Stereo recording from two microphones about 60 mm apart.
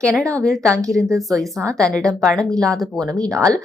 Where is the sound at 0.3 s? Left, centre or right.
Centre.